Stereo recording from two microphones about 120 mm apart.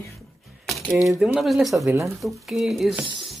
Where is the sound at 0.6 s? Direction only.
Centre (ahead or behind).